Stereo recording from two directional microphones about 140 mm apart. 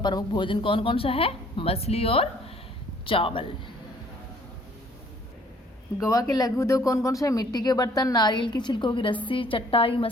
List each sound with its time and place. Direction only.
0.0 s speech: 30° left (ahead or behind)
6.0 s speech: 25° left (ahead or behind); by 10.1 s 40° left (ahead or behind)